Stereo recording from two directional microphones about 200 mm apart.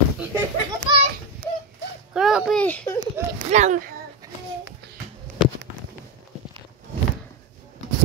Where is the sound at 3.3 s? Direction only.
35° right (ahead or behind).